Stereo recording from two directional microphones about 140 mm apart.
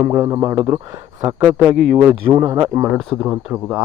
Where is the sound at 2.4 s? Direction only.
25° right (ahead or behind).